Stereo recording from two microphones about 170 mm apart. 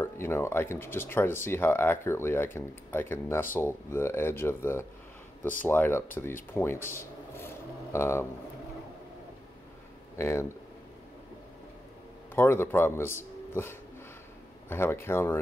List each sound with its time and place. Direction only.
0.0 s speech: 15° left (ahead or behind)
10.1 s speech: 15° left (ahead or behind)
12.4 s speech: 15° left (ahead or behind)